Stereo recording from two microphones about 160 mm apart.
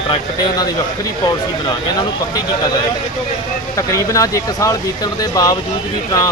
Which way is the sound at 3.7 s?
20° left (ahead or behind).